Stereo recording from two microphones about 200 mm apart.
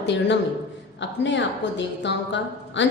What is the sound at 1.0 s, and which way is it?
A woman's voice, 65° left (ahead or behind).